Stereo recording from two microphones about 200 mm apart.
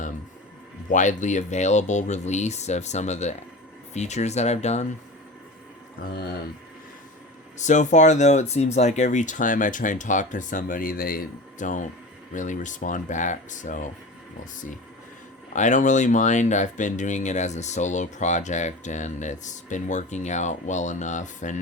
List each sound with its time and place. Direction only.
0.9 s speech: 40° left (ahead or behind)
7.6 s speech: 35° left (ahead or behind)
15.5 s speech: 40° left (ahead or behind)